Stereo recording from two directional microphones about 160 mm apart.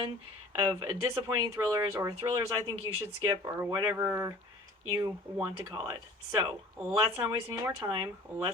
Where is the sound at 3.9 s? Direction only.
15° right (ahead or behind).